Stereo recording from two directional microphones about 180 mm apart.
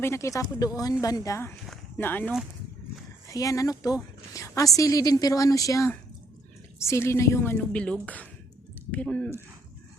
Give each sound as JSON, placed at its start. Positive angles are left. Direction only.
{"t": 0.0, "sound": "a woman's voice", "side_deg": 15}